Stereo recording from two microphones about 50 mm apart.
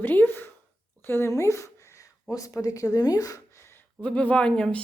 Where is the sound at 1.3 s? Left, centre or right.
Left.